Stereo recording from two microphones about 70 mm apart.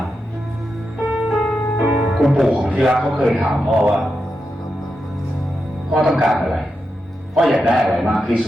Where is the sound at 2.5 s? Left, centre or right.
Centre.